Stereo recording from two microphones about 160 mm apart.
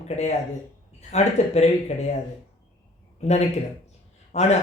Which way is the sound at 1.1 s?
45° left (ahead or behind).